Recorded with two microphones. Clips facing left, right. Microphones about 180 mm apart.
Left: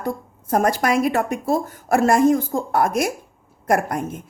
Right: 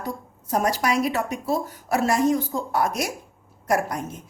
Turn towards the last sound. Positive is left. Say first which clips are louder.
# left 4 dB
turn(degrees=55)  # may be behind; listen again after turning